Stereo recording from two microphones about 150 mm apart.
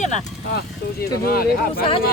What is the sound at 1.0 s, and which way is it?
Speech, 90° left.